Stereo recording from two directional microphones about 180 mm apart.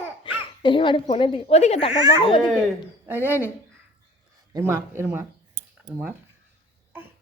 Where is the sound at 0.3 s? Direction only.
25° left (ahead or behind).